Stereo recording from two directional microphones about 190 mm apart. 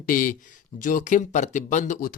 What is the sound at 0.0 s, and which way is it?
Speech, 45° left (ahead or behind).